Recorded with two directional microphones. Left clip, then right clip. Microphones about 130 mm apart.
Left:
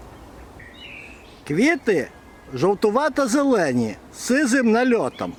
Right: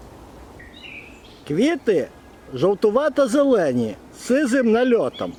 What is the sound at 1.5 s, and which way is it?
A man's voice, 30° left (ahead or behind).